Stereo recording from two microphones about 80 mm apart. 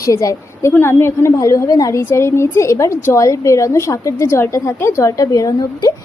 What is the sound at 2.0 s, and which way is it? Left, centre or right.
A woman's voice, left.